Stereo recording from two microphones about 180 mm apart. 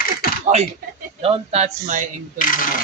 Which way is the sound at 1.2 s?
35° right (ahead or behind).